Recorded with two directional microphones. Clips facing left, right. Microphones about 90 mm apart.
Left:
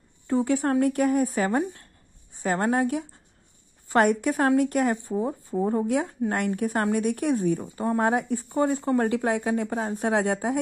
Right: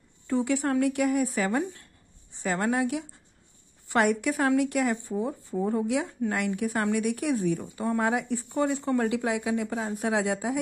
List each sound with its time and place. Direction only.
0.4 s a woman's voice: 35° left (ahead or behind)
6.3 s a woman's voice: 45° left (ahead or behind)
7.6 s a woman's voice: 30° left (ahead or behind)
9.1 s a woman's voice: 50° left (ahead or behind)